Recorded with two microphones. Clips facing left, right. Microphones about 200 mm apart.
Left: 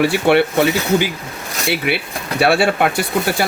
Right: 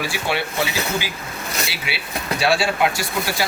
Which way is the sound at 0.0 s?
60° left (ahead or behind).